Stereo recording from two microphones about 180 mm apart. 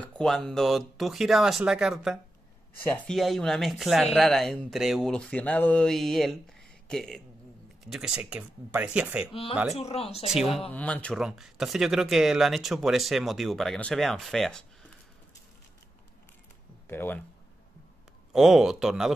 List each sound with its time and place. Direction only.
0.0 s speech: 5° left (ahead or behind)
9.3 s speech: 30° left (ahead or behind)
10.2 s speech: centre (ahead or behind)
10.7 s speech: 10° left (ahead or behind)
16.8 s speech: 10° left (ahead or behind)
18.3 s speech: centre (ahead or behind)